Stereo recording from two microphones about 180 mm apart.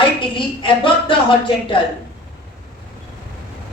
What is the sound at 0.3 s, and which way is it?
Speech, 30° left (ahead or behind).